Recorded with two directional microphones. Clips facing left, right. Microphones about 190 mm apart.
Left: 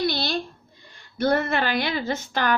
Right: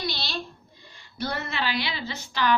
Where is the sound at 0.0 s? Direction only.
50° left (ahead or behind).